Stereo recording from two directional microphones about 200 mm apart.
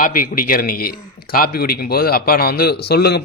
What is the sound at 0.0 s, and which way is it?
A man's voice, 45° left (ahead or behind).